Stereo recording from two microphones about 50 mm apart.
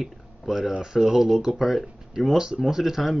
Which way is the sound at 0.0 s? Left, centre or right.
Centre.